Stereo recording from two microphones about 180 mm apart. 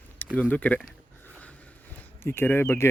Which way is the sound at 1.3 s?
10° left (ahead or behind).